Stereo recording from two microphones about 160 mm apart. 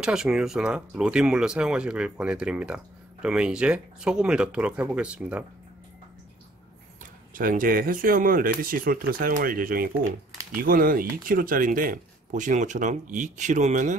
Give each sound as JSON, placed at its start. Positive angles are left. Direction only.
{"t": 0.0, "sound": "speech", "side_deg": -5}
{"t": 7.0, "sound": "speech", "side_deg": -60}